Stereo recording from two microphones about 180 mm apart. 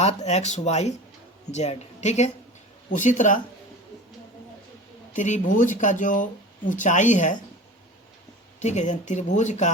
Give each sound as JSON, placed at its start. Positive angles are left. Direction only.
{"t": 0.0, "sound": "speech", "side_deg": 35}
{"t": 5.1, "sound": "speech", "side_deg": 45}
{"t": 8.6, "sound": "speech", "side_deg": 40}